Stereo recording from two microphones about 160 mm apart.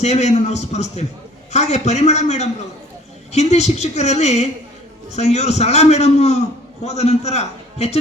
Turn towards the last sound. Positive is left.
turn(degrees=40)  # may be behind; listen again after turning